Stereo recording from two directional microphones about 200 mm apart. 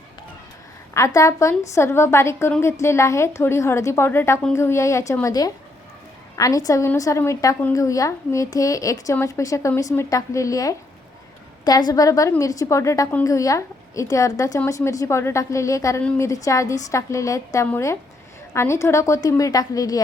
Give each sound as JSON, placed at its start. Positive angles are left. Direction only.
{"t": 0.9, "sound": "a woman's voice", "side_deg": 15}